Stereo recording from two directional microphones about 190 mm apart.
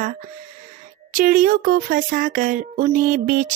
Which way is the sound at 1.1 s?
45° right (ahead or behind).